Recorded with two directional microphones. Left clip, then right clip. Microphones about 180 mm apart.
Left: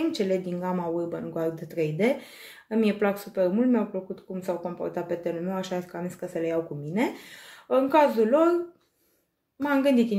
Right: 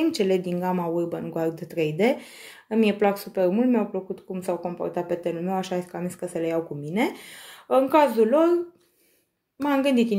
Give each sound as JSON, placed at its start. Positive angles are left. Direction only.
{"t": 0.0, "sound": "speech", "side_deg": -35}
{"t": 9.6, "sound": "speech", "side_deg": -30}